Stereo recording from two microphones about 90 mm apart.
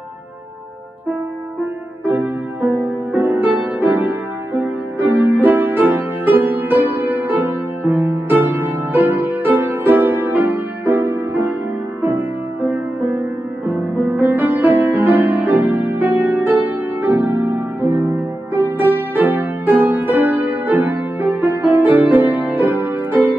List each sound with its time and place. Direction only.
2.0 s music: 20° right (ahead or behind)